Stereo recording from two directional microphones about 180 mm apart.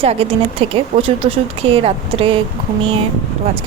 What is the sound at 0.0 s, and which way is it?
Speech, 35° right (ahead or behind).